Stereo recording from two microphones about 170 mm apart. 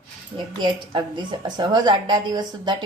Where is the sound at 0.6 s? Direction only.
25° right (ahead or behind).